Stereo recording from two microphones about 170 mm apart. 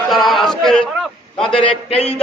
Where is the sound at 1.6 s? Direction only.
40° left (ahead or behind).